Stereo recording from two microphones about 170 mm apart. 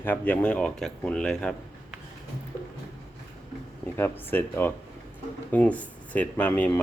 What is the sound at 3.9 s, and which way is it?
Speech, 10° left (ahead or behind).